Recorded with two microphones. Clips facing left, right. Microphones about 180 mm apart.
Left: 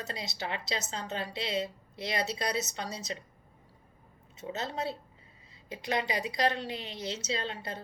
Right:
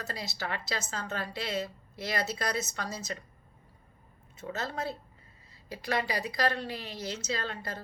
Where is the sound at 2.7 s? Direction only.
25° left (ahead or behind).